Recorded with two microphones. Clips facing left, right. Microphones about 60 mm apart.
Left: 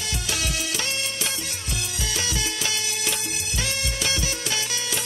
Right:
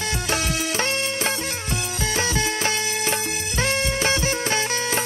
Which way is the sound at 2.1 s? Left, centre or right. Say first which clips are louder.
Right 6 dB; right.